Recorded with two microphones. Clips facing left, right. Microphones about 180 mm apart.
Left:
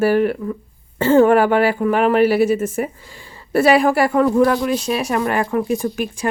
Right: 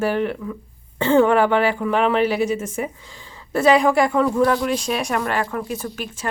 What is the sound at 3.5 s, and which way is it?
Speech, 5° left (ahead or behind).